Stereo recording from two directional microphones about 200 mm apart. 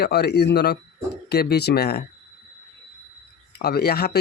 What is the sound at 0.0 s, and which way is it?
Speech, 55° left (ahead or behind).